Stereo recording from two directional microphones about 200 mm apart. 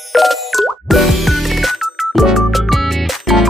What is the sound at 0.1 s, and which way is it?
Music, centre (ahead or behind).